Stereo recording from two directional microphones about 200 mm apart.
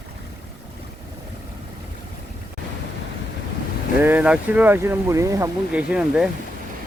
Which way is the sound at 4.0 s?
10° right (ahead or behind).